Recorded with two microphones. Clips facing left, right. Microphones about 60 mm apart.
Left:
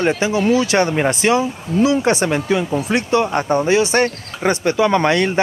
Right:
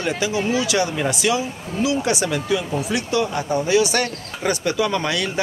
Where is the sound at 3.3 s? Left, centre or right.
Left.